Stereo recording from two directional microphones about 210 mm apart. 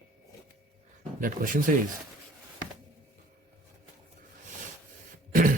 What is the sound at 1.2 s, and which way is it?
Speech, 40° right (ahead or behind).